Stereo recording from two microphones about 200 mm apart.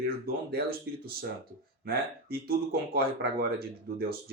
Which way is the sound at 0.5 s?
50° right (ahead or behind).